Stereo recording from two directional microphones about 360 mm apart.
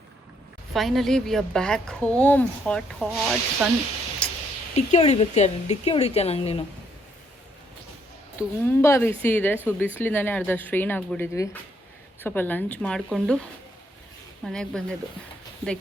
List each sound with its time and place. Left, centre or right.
0.7 s speech: centre
4.2 s a sound: centre
4.9 s speech: centre
8.4 s speech: centre
14.4 s speech: centre